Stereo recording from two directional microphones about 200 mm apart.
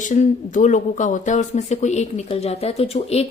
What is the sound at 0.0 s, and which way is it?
Speech, 40° left (ahead or behind).